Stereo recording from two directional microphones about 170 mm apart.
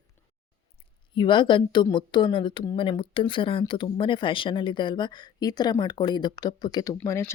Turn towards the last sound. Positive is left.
turn(degrees=15)  # may be behind; listen again after turning